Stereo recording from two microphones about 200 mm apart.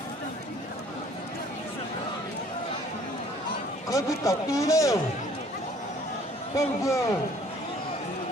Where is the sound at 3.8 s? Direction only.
15° left (ahead or behind).